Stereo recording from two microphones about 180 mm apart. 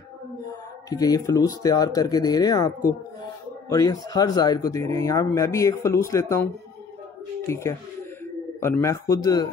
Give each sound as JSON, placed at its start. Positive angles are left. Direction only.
{"t": 0.8, "sound": "speech", "side_deg": 20}
{"t": 7.4, "sound": "speech", "side_deg": 15}